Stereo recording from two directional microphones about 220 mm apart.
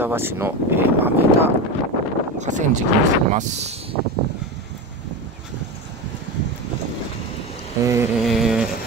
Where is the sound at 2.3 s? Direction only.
35° right (ahead or behind).